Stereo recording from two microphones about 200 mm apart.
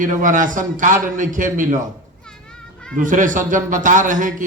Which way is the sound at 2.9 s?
40° right (ahead or behind).